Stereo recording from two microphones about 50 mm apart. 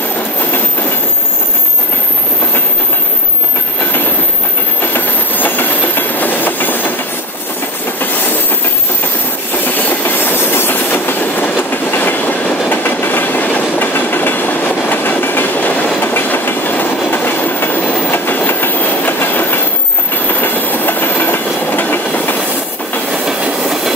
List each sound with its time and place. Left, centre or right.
4.9 s train: left
9.7 s train: left